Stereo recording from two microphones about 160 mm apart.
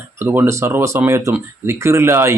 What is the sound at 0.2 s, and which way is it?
Speech, 15° right (ahead or behind).